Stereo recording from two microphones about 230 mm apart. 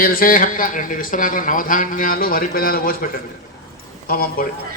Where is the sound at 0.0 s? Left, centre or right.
Left.